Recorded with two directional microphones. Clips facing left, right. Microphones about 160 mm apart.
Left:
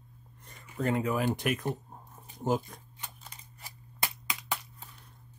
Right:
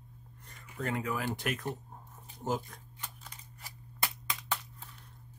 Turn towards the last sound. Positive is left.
turn(degrees=10)  # may be behind; listen again after turning